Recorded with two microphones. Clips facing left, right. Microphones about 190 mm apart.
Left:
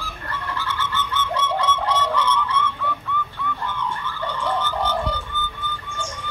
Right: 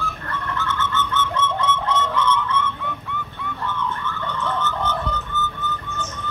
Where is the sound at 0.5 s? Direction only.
30° left (ahead or behind).